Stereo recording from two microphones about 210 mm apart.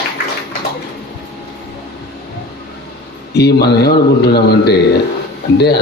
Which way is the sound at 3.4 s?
50° left (ahead or behind).